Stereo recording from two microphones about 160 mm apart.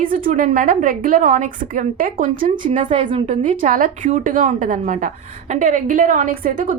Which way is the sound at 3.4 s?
55° right (ahead or behind).